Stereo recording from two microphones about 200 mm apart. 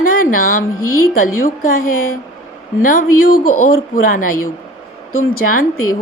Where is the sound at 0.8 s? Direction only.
90° left.